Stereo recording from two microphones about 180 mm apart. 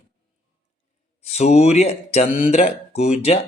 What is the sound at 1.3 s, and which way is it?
A man's voice, 35° left (ahead or behind).